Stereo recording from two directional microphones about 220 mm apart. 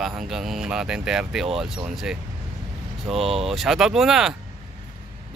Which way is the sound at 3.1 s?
25° right (ahead or behind).